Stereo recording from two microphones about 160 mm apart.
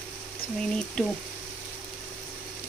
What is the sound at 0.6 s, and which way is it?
Speech, 5° left (ahead or behind).